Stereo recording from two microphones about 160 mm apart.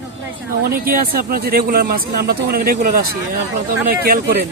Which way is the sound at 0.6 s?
65° right (ahead or behind).